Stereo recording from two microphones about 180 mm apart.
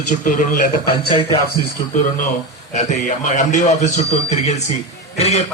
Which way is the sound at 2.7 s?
45° left (ahead or behind).